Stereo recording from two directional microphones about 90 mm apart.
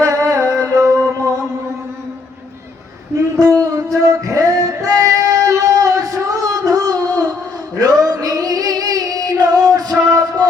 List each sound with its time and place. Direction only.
0.0 s music: 40° right (ahead or behind)
3.3 s music: 40° right (ahead or behind)